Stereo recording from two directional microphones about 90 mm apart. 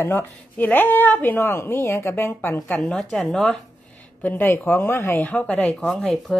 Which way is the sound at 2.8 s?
5° left (ahead or behind).